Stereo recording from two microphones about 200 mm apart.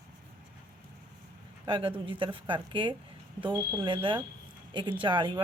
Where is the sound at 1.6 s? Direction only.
25° right (ahead or behind).